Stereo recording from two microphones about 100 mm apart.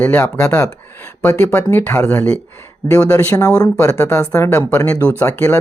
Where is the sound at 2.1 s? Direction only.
15° left (ahead or behind).